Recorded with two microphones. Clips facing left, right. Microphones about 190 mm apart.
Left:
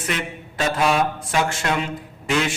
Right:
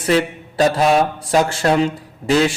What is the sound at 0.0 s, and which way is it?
A man's voice, 35° right (ahead or behind).